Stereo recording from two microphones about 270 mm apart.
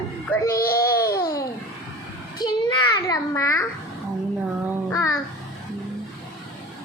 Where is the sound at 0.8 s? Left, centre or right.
Centre.